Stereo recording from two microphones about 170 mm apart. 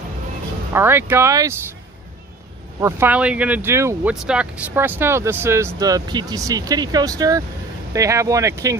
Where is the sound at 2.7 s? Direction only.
15° right (ahead or behind).